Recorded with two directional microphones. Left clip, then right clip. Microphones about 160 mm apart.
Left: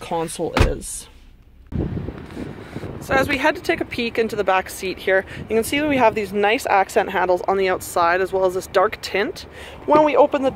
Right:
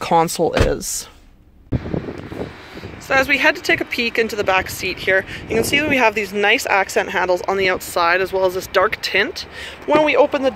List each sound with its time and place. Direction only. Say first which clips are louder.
0.0 s chopping: right 8 dB; 20° right (ahead or behind)
3.1 s speech: right 3 dB; 5° left (ahead or behind)